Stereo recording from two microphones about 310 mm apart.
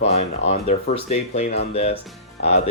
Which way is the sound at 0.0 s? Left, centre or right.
Centre.